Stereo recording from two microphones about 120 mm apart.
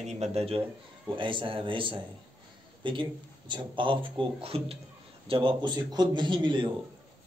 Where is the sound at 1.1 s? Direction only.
45° right (ahead or behind).